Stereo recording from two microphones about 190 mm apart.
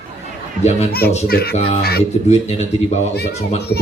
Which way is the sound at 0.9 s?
55° left (ahead or behind).